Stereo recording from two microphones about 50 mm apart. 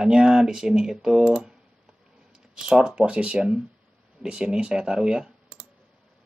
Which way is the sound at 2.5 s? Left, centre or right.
Centre.